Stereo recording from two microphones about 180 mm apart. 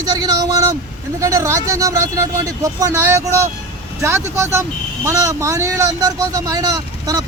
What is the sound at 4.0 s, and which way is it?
Speech, 15° right (ahead or behind).